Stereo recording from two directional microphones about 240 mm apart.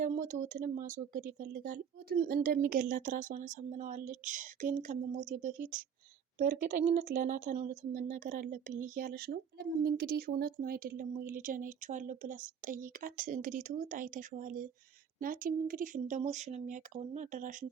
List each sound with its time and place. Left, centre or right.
0.0 s speech: right